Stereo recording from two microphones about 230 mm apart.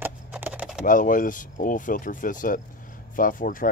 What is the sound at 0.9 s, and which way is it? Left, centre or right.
Speech, left.